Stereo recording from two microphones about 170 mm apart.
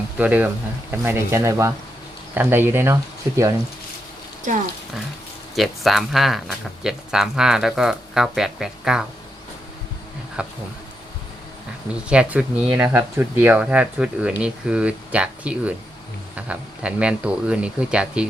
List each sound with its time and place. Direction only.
0.2 s speech: 10° right (ahead or behind)
4.5 s speech: 50° right (ahead or behind)
5.5 s speech: centre (ahead or behind)
10.4 s speech: 5° right (ahead or behind)
12.0 s speech: 5° right (ahead or behind)